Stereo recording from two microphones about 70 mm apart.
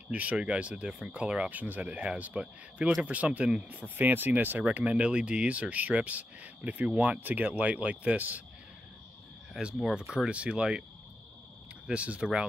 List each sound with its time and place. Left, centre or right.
0.1 s speech: centre
1.5 s speech: right
9.6 s speech: centre
11.9 s speech: centre